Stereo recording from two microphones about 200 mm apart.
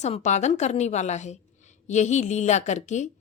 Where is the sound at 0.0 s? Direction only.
35° left (ahead or behind).